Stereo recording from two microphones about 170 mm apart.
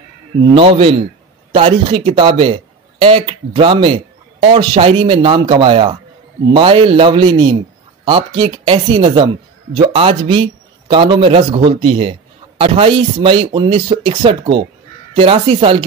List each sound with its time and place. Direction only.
0.4 s a man's voice: 30° right (ahead or behind)